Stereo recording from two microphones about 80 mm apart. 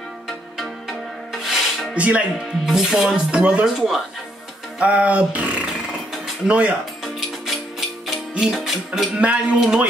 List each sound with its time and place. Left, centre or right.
0.6 s rub: centre
2.0 s speech: centre
2.6 s speech: centre
4.7 s speech: centre
6.2 s music: centre
8.1 s music: centre
9.1 s speech: centre